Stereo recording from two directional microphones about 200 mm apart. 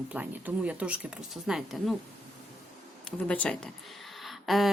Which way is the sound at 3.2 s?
5° left (ahead or behind).